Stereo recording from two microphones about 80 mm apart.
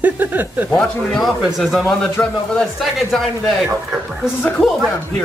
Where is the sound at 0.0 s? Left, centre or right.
Right.